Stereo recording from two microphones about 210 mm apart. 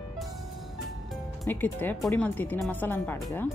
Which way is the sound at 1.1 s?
10° left (ahead or behind).